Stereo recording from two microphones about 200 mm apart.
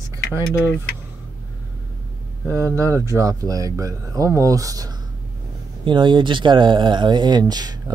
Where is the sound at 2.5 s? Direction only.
15° right (ahead or behind).